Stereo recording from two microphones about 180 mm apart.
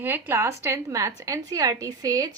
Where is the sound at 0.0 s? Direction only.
10° right (ahead or behind).